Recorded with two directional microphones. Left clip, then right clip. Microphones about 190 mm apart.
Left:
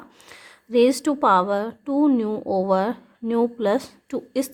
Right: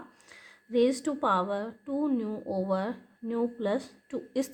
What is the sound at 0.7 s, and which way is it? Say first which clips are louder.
Speech: left 8 dB; 30° left (ahead or behind).